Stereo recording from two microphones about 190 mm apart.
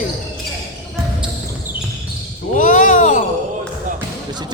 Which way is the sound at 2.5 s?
45° left (ahead or behind).